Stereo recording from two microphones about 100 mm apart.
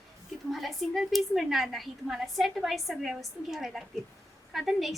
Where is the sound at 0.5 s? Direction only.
Centre (ahead or behind).